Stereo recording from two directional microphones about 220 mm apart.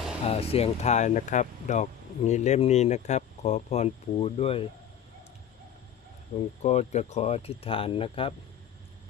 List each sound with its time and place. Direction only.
0.3 s speech: 25° left (ahead or behind)
6.6 s speech: 30° left (ahead or behind)